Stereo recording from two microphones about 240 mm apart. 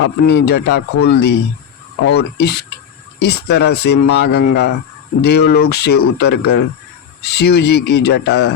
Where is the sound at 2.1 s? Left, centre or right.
Left.